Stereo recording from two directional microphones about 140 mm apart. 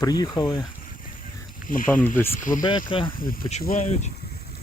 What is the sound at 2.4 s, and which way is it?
Speech, 70° left (ahead or behind).